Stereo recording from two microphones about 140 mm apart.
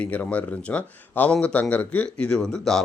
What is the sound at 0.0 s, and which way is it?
Speech, 10° left (ahead or behind).